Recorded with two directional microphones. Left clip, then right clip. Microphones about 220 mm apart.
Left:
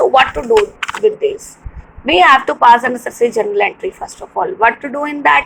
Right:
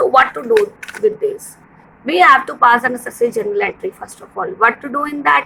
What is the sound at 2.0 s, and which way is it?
Speech, 45° right (ahead or behind).